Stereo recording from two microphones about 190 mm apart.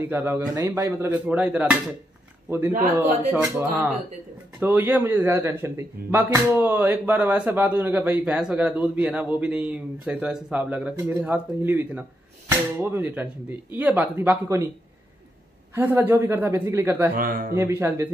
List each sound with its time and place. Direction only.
0.0 s a man's voice: 10° right (ahead or behind)
3.3 s a man's voice: 15° right (ahead or behind)
15.7 s a man's voice: 10° right (ahead or behind)
17.1 s speech: 50° right (ahead or behind)
17.6 s a man's voice: 15° right (ahead or behind)